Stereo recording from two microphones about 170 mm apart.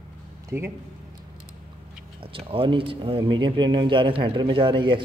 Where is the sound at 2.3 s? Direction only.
30° right (ahead or behind).